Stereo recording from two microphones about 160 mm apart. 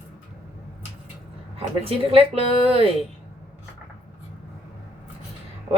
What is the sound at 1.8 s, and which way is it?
A woman's voice, 35° right (ahead or behind).